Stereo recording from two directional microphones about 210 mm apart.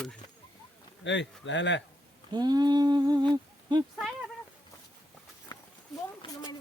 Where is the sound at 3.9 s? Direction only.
Centre (ahead or behind).